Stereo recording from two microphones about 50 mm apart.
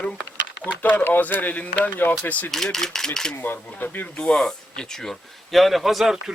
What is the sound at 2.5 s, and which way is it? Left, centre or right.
Speech, centre.